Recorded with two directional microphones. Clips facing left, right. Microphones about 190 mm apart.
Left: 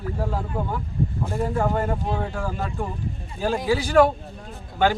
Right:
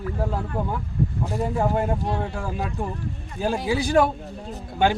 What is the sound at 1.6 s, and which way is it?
Speech, 10° right (ahead or behind).